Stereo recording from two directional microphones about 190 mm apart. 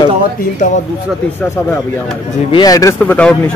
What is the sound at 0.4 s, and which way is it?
Speech, 40° left (ahead or behind).